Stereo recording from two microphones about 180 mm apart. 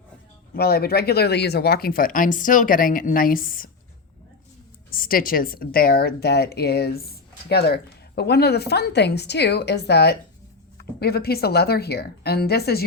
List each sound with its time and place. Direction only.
0.5 s speech: 60° left (ahead or behind)
4.9 s a woman's voice: 50° left (ahead or behind)